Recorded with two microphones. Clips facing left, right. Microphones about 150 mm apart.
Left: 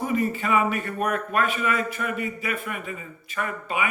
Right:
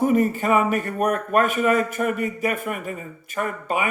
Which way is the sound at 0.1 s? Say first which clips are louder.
Right 5 dB; 45° right (ahead or behind).